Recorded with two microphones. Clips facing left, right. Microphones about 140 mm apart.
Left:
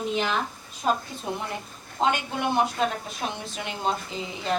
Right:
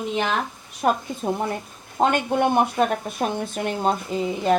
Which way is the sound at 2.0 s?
50° right (ahead or behind).